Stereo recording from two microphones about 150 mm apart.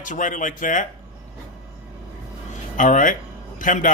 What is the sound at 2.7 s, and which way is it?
Speech, 60° left (ahead or behind).